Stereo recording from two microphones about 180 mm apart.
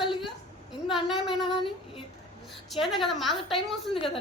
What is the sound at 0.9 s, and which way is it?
Speech, centre (ahead or behind).